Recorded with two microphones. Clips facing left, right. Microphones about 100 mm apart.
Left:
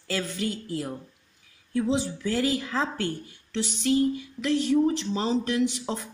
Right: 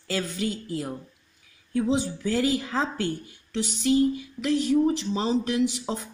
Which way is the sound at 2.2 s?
20° right (ahead or behind).